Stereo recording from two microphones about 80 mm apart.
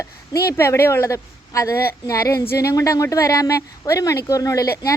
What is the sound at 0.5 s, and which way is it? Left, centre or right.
A woman's voice, left.